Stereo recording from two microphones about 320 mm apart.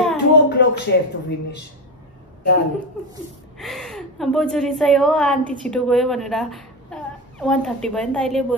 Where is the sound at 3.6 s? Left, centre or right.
Centre.